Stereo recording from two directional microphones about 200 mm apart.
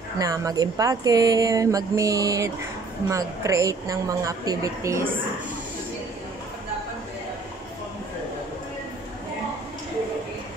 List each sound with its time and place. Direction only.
0.2 s speech: 15° right (ahead or behind)